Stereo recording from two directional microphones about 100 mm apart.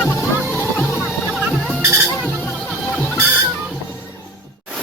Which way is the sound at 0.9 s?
5° right (ahead or behind).